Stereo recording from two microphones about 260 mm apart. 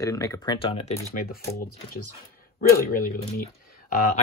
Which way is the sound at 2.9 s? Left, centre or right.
Left.